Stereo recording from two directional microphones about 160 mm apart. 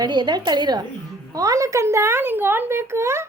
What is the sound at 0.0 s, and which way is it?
A woman's voice, 25° right (ahead or behind).